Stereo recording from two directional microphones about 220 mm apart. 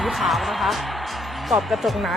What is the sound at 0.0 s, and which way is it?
Music, centre (ahead or behind).